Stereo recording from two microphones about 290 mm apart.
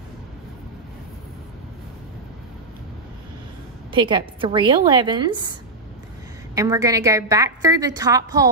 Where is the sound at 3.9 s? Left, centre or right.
Centre.